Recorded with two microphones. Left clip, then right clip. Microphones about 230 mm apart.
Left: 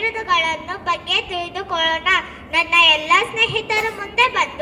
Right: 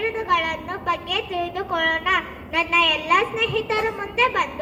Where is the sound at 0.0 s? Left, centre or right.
Left.